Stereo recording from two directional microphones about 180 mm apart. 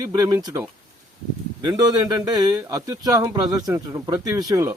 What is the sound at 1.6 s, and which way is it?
Speech, 20° right (ahead or behind).